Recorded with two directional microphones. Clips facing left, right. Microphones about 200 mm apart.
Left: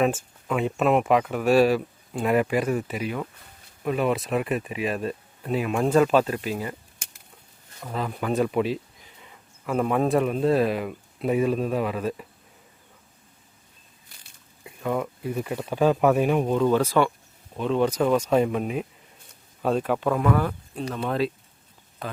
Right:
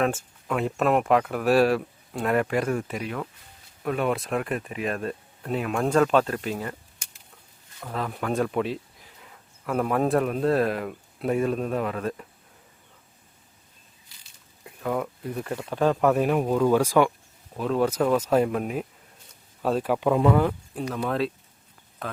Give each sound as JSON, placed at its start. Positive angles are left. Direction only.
{"t": 0.0, "sound": "speech", "side_deg": 5}
{"t": 7.8, "sound": "speech", "side_deg": 0}
{"t": 14.6, "sound": "speech", "side_deg": 0}
{"t": 20.1, "sound": "speech", "side_deg": -20}
{"t": 20.9, "sound": "speech", "side_deg": 0}